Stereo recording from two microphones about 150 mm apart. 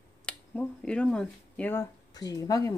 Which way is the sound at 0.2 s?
5° left (ahead or behind).